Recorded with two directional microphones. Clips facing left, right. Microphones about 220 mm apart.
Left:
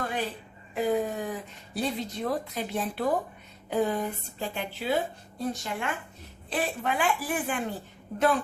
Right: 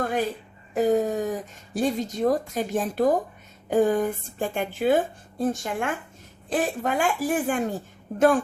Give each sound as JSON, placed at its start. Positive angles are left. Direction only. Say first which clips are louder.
{"t": 0.0, "sound": "a woman's voice", "louder": "right 6 dB", "side_deg": -45}